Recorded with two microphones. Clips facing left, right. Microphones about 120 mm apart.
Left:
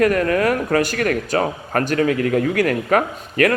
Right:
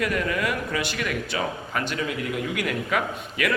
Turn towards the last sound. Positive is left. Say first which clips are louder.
# left 8 dB
turn(degrees=50)  # may be behind; listen again after turning